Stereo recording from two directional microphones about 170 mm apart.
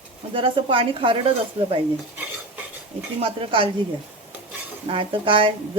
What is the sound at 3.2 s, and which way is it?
Speech, 35° right (ahead or behind).